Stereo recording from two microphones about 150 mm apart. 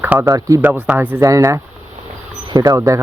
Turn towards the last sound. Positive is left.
turn(degrees=-20)  # may be behind; listen again after turning